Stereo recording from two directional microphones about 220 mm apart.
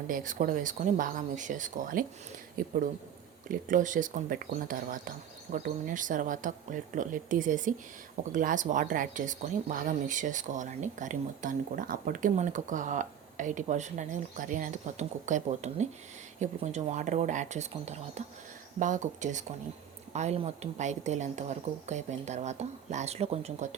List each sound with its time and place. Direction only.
0.1 s speech: 35° right (ahead or behind)